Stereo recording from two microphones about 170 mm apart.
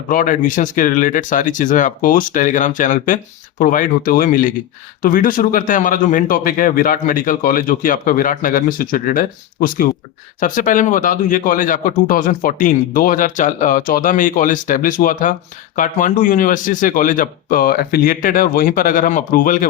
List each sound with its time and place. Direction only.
0.1 s speech: 55° left (ahead or behind)